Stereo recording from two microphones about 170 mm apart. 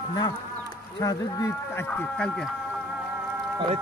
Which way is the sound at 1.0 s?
20° left (ahead or behind).